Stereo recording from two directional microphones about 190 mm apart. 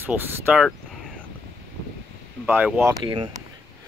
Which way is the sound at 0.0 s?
10° right (ahead or behind).